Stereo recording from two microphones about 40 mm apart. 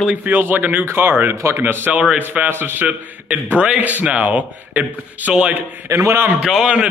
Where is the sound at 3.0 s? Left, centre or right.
Right.